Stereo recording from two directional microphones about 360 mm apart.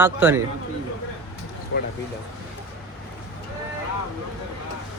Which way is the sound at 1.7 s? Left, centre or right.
Left.